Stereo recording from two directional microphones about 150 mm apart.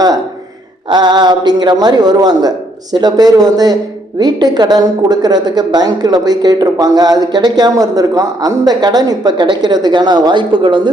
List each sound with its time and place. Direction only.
0.9 s a man's voice: 30° right (ahead or behind)